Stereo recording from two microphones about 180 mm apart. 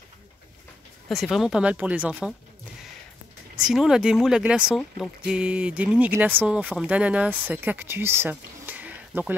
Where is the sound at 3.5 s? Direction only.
5° right (ahead or behind).